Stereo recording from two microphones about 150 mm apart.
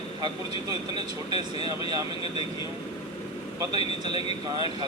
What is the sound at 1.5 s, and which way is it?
Speech, 35° left (ahead or behind).